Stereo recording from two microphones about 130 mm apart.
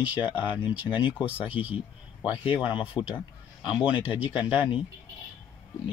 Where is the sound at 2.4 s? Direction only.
40° left (ahead or behind).